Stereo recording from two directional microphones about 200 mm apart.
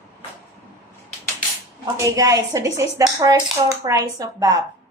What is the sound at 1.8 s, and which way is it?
A woman's voice, 15° right (ahead or behind).